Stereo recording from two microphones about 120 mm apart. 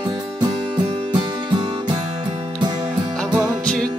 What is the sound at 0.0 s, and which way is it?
Music, 35° right (ahead or behind).